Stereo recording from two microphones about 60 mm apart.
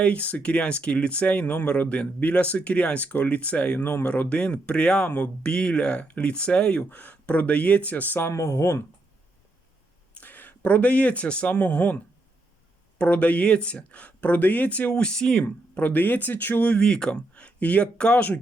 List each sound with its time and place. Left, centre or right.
0.0 s speech: left
5.0 s speech: left
5.4 s speech: centre
8.3 s speech: left
10.2 s speech: left; by 15.4 s centre
15.7 s speech: left